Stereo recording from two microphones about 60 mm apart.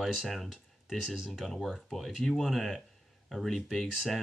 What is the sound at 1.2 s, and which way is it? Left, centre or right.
Speech, centre.